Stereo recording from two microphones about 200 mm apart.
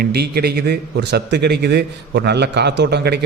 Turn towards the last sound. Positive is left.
turn(degrees=-55)  # may be behind; listen again after turning